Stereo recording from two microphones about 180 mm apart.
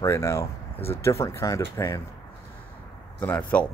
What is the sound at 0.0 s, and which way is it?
Speech, 15° left (ahead or behind).